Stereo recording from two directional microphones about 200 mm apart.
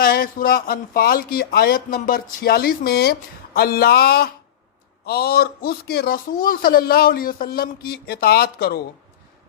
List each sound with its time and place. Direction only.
0.0 s speech: 50° left (ahead or behind)